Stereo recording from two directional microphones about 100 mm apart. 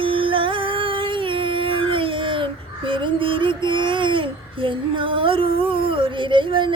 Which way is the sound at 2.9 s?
60° right (ahead or behind).